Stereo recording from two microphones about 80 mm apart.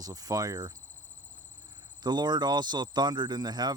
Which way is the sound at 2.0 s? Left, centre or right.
Right.